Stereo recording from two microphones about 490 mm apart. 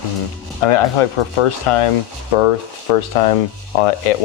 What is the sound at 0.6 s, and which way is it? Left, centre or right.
Speech, left.